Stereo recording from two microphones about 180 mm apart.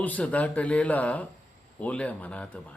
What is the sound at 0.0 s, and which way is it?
A man's voice, 10° left (ahead or behind).